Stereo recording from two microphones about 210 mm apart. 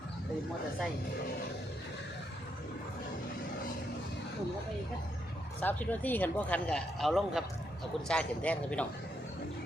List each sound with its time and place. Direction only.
5.5 s a man's voice: 10° left (ahead or behind)